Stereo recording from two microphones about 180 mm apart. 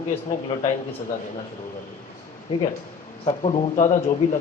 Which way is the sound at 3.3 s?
35° left (ahead or behind).